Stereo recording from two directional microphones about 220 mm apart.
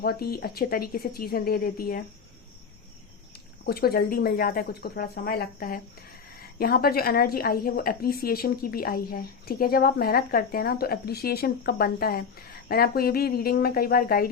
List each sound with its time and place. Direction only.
0.0 s a woman's voice: 45° left (ahead or behind)
3.7 s a woman's voice: 45° left (ahead or behind)